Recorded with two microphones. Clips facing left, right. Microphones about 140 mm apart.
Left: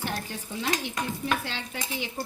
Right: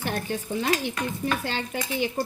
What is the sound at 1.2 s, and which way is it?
A woman's voice, 50° right (ahead or behind).